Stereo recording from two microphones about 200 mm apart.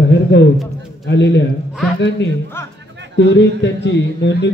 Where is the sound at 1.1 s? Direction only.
60° left (ahead or behind).